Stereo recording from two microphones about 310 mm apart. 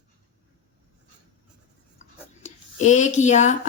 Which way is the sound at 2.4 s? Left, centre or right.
Left.